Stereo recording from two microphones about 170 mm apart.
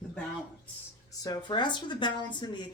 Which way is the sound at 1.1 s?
20° left (ahead or behind).